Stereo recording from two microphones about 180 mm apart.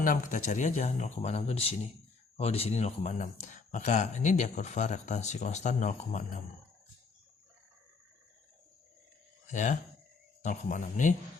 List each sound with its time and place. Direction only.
0.0 s speech: 50° left (ahead or behind)
9.5 s speech: 45° left (ahead or behind)